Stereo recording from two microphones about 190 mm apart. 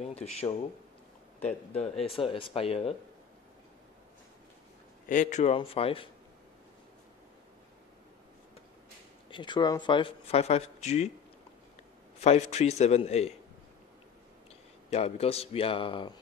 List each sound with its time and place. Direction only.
0.0 s a sound: 35° left (ahead or behind)
1.7 s speech: 35° left (ahead or behind)
5.0 s speech: 40° left (ahead or behind)
9.3 s speech: 25° left (ahead or behind)
12.2 s speech: 35° left (ahead or behind)
14.9 s speech: 35° left (ahead or behind)